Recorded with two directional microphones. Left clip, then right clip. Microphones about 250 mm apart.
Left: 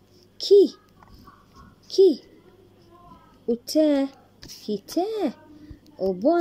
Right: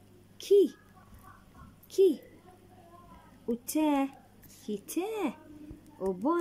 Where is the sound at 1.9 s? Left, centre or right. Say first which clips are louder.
Left 7 dB; right.